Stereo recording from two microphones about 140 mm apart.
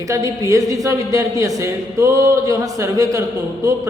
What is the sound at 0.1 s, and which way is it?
Speech, 25° right (ahead or behind).